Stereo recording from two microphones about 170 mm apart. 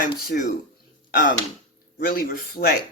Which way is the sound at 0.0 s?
55° left (ahead or behind).